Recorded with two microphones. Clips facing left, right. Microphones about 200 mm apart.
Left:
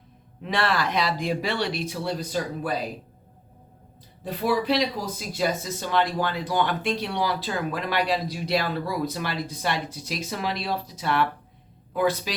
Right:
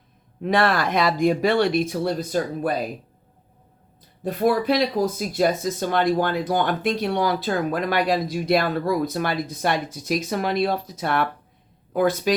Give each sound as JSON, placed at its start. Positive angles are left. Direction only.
{"t": 0.4, "sound": "speech", "side_deg": -50}
{"t": 4.2, "sound": "speech", "side_deg": -50}